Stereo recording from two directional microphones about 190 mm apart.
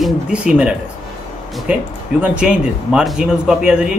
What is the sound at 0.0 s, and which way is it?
Speech, 5° right (ahead or behind).